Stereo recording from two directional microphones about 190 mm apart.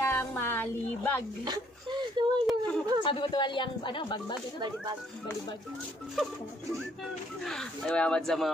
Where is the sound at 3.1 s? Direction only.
25° left (ahead or behind).